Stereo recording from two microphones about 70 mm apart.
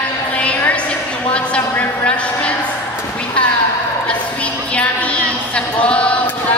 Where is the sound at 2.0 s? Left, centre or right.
Centre.